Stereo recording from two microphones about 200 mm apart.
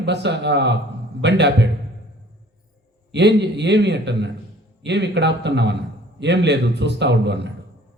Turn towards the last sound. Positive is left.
turn(degrees=-60)  # may be behind; listen again after turning